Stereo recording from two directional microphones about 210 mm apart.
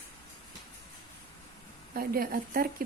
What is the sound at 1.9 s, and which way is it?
Speech, 45° right (ahead or behind).